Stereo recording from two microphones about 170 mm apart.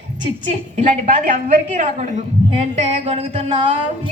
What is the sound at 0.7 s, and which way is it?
A woman's voice, 50° right (ahead or behind).